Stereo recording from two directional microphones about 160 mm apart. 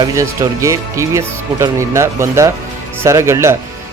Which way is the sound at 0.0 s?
20° right (ahead or behind).